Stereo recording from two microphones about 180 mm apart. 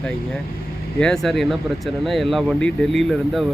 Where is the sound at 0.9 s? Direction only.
5° left (ahead or behind).